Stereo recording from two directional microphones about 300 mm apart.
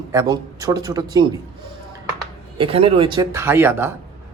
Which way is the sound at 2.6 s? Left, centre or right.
Centre.